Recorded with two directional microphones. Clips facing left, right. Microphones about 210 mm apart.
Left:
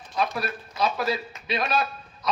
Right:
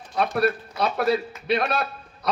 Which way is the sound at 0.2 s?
60° right (ahead or behind).